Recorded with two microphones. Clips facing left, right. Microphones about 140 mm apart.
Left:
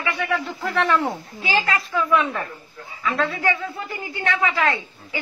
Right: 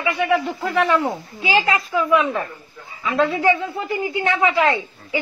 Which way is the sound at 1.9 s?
10° right (ahead or behind).